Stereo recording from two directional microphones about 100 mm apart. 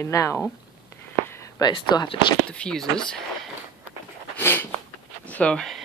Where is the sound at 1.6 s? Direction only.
45° left (ahead or behind).